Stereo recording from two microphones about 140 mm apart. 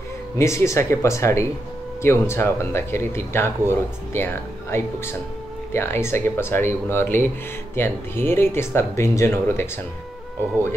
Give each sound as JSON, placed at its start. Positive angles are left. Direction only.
{"t": 0.4, "sound": "speech", "side_deg": 20}